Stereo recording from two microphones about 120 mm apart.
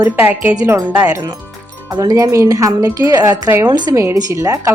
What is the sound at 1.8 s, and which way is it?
Speech, 30° right (ahead or behind).